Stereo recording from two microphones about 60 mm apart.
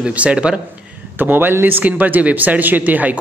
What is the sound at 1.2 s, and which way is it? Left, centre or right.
A man's voice, right.